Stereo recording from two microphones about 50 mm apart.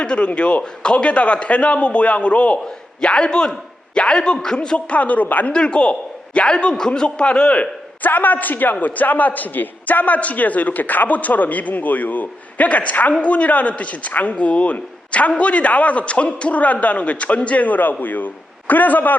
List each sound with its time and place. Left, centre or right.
0.0 s a man's voice: left
4.9 s a man's voice: left
5.5 s a man's voice: centre
8.0 s a man's voice: left